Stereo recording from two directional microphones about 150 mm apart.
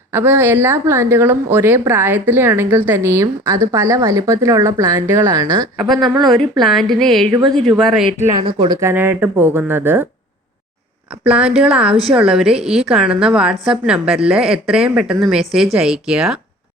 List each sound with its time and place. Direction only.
0.1 s speech: 15° right (ahead or behind)
5.8 s a woman's voice: centre (ahead or behind)
8.4 s speech: 35° right (ahead or behind)
8.8 s speech: 15° right (ahead or behind)
11.1 s a woman's voice: 10° right (ahead or behind)